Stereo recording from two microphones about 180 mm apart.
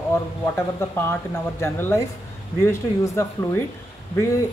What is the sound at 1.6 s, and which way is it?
Speech, 15° left (ahead or behind).